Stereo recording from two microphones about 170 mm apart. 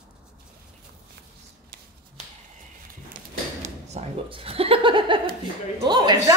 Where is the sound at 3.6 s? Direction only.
40° right (ahead or behind).